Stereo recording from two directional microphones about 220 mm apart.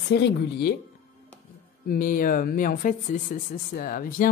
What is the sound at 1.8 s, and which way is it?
Speech, 40° left (ahead or behind).